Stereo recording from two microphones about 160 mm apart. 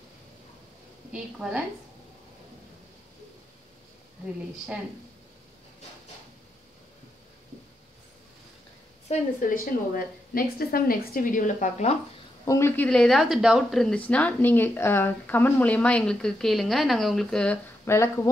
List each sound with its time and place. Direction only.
1.1 s speech: 5° right (ahead or behind)
9.1 s a woman's voice: 60° left (ahead or behind)
12.4 s speech: 15° left (ahead or behind)
17.8 s speech: 15° left (ahead or behind)